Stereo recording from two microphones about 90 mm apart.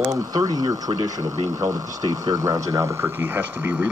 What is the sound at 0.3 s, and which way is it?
Speech, 45° right (ahead or behind).